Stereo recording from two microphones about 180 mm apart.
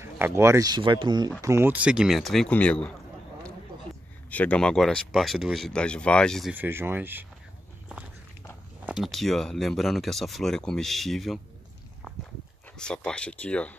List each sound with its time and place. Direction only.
0.0 s speech: 15° right (ahead or behind); by 2.9 s 5° left (ahead or behind)
4.3 s speech: 10° left (ahead or behind)
6.5 s speech: 10° right (ahead or behind)
8.8 s speech: centre (ahead or behind)
12.7 s speech: 5° left (ahead or behind)